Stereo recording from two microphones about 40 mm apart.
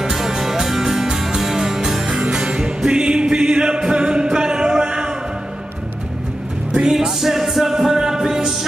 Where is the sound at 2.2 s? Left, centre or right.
Right.